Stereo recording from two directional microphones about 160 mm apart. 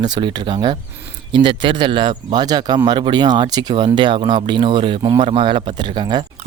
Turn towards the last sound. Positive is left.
turn(degrees=-30)  # may be behind; listen again after turning